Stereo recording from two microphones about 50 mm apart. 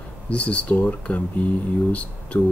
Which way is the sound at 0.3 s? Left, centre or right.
Left.